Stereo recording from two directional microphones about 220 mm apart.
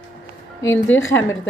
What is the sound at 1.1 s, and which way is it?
Speech, 15° left (ahead or behind).